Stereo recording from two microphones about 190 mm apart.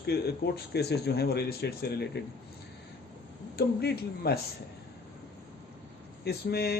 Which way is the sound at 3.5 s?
55° left (ahead or behind).